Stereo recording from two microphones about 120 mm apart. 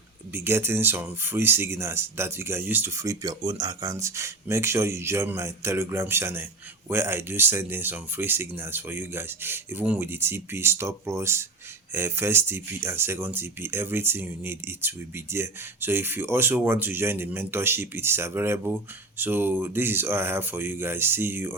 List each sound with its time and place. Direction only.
0.3 s speech: 20° right (ahead or behind)